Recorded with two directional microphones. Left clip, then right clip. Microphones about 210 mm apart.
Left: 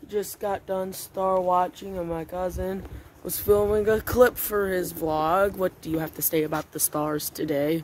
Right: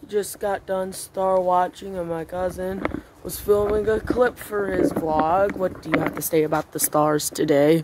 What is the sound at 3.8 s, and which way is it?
Speech, 50° left (ahead or behind).